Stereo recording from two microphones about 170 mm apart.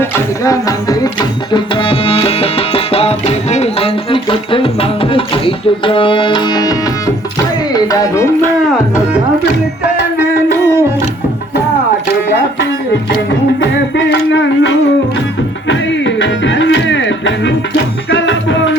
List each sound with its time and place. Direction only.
0.0 s music: 20° left (ahead or behind)
7.7 s tabla: 20° left (ahead or behind)
10.2 s music: 15° right (ahead or behind)
13.6 s a sound: 90° left
15.6 s music: 90° left